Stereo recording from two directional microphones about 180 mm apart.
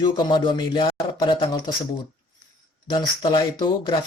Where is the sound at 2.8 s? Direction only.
25° left (ahead or behind).